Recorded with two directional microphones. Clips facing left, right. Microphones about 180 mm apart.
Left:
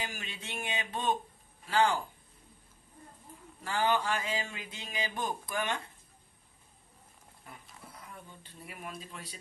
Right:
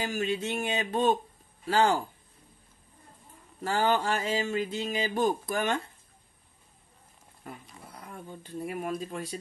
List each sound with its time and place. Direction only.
0.0 s a sound: 40° right (ahead or behind)
1.7 s speech: 40° right (ahead or behind)
3.6 s speech: 45° right (ahead or behind)
8.0 s speech: 45° right (ahead or behind)